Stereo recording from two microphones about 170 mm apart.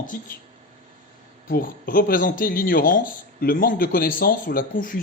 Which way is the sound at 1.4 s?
55° left (ahead or behind).